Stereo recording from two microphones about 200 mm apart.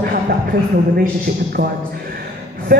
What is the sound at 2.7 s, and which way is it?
Speech, 45° right (ahead or behind).